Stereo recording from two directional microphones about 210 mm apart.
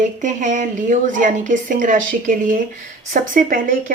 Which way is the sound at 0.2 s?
35° right (ahead or behind).